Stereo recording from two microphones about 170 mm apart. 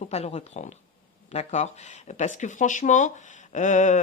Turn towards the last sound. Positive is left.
turn(degrees=45)  # may be behind; listen again after turning